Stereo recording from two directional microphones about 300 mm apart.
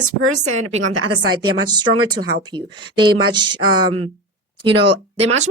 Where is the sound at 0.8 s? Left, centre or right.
Right.